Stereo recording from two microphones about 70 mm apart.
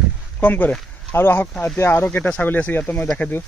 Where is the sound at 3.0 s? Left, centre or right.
Centre.